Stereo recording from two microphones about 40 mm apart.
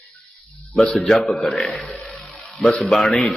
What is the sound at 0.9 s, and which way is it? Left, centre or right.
Speech, centre.